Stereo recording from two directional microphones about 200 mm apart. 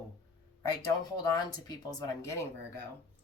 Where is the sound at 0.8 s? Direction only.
20° left (ahead or behind).